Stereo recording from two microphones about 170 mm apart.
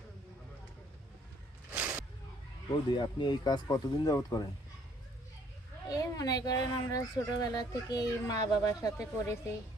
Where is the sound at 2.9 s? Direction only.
25° left (ahead or behind).